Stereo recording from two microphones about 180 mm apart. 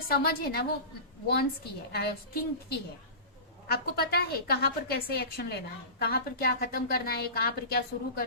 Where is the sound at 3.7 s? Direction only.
60° left (ahead or behind).